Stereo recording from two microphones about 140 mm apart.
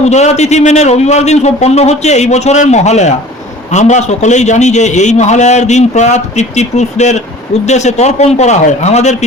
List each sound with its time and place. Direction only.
0.0 s a man's voice: 55° left (ahead or behind)